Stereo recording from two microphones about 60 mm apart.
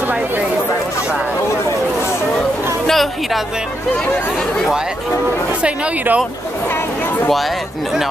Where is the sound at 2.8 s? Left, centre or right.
Centre.